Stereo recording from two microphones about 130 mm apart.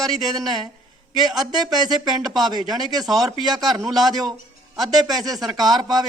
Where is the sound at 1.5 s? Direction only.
30° right (ahead or behind).